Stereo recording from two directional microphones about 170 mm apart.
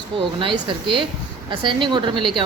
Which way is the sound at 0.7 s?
30° right (ahead or behind).